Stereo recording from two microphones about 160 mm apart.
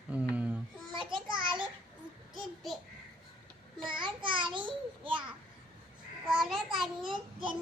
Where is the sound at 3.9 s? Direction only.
30° right (ahead or behind).